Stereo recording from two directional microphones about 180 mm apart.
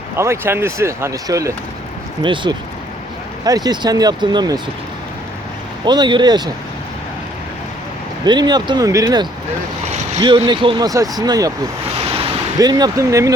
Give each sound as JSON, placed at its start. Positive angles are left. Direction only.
{"t": 0.2, "sound": "speech", "side_deg": -15}
{"t": 5.8, "sound": "speech", "side_deg": -25}
{"t": 8.2, "sound": "speech", "side_deg": -25}
{"t": 12.5, "sound": "speech", "side_deg": -20}